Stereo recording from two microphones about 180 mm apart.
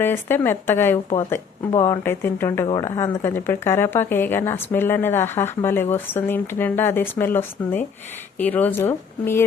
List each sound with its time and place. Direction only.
0.0 s speech: 10° left (ahead or behind)